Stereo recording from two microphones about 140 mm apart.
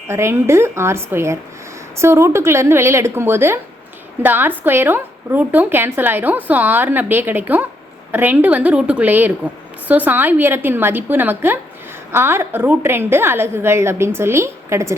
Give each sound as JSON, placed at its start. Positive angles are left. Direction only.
{"t": 0.1, "sound": "a woman's voice", "side_deg": -20}